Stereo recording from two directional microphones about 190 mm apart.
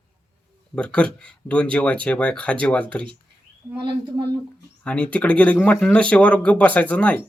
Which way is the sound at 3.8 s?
25° right (ahead or behind).